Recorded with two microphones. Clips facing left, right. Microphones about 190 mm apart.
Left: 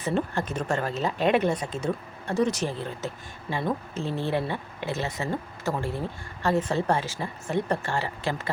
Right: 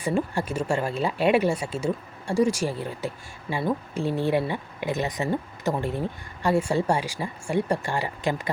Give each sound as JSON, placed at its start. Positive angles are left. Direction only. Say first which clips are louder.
{"t": 0.0, "sound": "speech", "louder": "right 2 dB", "side_deg": -10}